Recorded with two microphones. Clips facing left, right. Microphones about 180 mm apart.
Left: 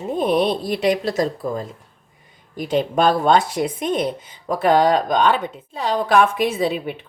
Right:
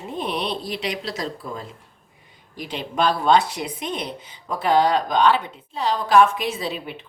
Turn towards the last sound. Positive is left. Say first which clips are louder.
# left 7 dB
turn(degrees=55)  # may be behind; listen again after turning